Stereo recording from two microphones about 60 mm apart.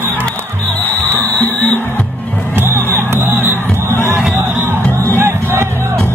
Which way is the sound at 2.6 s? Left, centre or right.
Right.